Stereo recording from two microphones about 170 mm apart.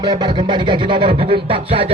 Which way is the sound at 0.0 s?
30° right (ahead or behind).